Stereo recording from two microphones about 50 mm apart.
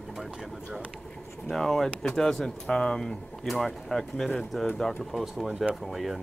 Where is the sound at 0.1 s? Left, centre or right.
Centre.